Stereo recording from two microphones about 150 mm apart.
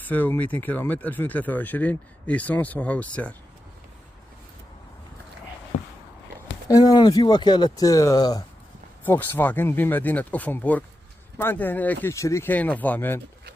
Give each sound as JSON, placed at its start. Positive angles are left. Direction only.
{"t": 0.1, "sound": "speech", "side_deg": 10}
{"t": 6.7, "sound": "speech", "side_deg": 25}
{"t": 9.0, "sound": "speech", "side_deg": 10}